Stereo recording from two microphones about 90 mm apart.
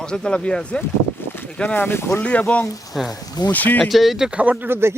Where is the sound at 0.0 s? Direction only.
10° left (ahead or behind); by 2.2 s 30° left (ahead or behind).